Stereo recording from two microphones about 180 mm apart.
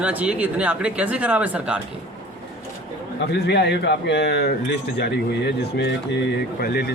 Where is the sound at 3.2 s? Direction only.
65° left (ahead or behind).